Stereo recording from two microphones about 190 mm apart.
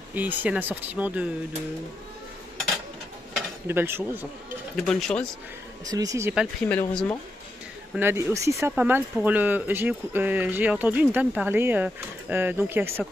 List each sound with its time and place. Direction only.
0.1 s speech: 10° right (ahead or behind)
3.3 s speech: 10° right (ahead or behind)
4.7 s speech: centre (ahead or behind)
5.9 s speech: 20° right (ahead or behind)
6.7 s speech: 5° left (ahead or behind)
7.9 s speech: 10° right (ahead or behind)